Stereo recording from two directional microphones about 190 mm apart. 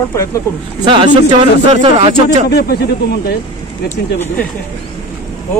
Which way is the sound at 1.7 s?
30° right (ahead or behind).